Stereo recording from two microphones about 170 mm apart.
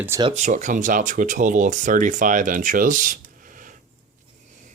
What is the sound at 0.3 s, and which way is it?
Speech, 45° right (ahead or behind).